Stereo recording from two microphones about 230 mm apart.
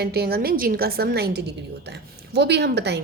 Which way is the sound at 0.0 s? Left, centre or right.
Right.